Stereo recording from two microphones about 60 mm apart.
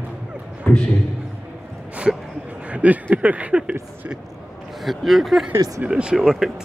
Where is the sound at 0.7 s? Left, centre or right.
Left.